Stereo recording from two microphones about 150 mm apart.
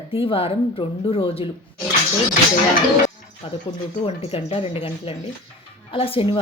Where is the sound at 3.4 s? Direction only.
40° left (ahead or behind).